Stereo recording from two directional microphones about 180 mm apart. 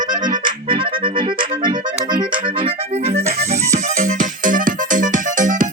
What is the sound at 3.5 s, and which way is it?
Music, 40° right (ahead or behind).